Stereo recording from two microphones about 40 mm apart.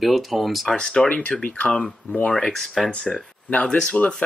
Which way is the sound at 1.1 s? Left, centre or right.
Left.